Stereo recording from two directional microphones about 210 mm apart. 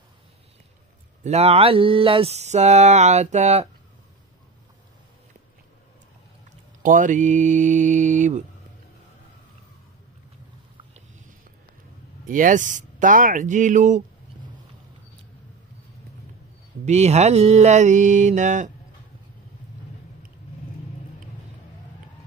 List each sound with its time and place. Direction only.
1.2 s mantra: 30° right (ahead or behind)
6.8 s mantra: 40° right (ahead or behind)
12.3 s mantra: 40° right (ahead or behind)
16.8 s mantra: 30° right (ahead or behind)